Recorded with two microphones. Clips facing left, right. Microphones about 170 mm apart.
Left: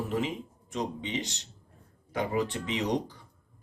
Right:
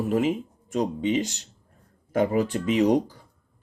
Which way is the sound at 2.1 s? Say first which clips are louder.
Right 7 dB; 45° right (ahead or behind).